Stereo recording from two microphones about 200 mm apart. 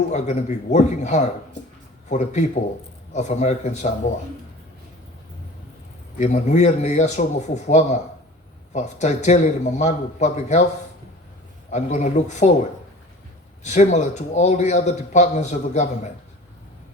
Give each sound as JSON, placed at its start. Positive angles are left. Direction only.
{"t": 0.1, "sound": "a man's voice", "side_deg": 35}
{"t": 6.1, "sound": "a man's voice", "side_deg": 35}
{"t": 11.7, "sound": "a man's voice", "side_deg": 35}
{"t": 13.7, "sound": "a man's voice", "side_deg": 35}